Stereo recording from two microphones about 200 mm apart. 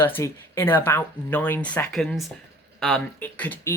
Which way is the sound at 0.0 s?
10° left (ahead or behind).